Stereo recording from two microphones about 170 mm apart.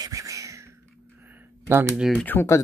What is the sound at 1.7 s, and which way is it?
Speech, 15° right (ahead or behind).